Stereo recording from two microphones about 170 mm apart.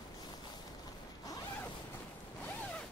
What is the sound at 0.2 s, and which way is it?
Zipper, 25° left (ahead or behind).